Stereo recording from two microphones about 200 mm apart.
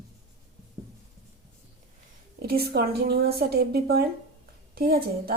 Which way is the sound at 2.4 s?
50° right (ahead or behind).